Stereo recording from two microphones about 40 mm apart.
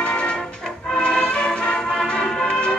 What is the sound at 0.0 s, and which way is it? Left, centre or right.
Music, left.